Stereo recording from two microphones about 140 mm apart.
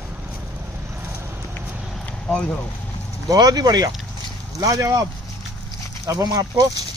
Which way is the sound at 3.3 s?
30° right (ahead or behind).